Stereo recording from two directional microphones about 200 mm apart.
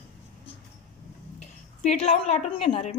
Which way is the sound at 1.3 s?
35° left (ahead or behind).